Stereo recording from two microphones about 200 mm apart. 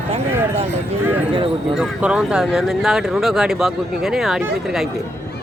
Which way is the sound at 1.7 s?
5° right (ahead or behind).